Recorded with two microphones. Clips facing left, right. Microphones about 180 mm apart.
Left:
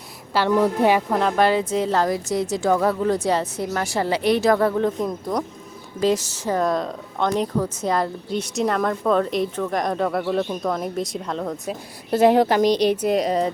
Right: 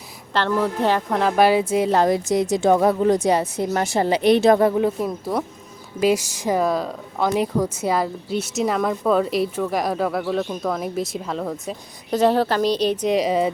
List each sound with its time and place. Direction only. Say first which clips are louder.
0.3 s a woman's voice: left 2 dB; 10° left (ahead or behind)
1.2 s a woman's voice: right 2 dB; 10° right (ahead or behind)